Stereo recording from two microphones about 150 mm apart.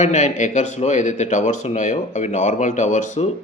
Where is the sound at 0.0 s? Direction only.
50° left (ahead or behind).